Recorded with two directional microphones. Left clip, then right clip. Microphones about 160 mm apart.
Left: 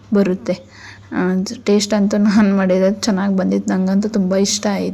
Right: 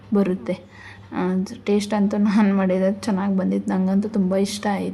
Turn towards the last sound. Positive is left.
turn(degrees=25)  # may be behind; listen again after turning